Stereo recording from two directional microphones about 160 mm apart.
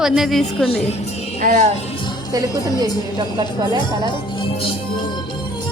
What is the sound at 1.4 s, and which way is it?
Speech, 50° right (ahead or behind).